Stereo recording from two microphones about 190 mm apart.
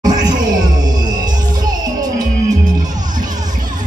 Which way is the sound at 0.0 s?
20° right (ahead or behind).